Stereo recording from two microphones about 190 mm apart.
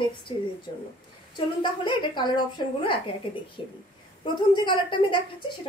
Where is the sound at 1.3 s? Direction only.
25° left (ahead or behind).